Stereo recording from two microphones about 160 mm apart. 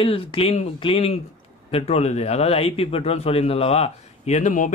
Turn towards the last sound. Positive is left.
turn(degrees=50)  # may be behind; listen again after turning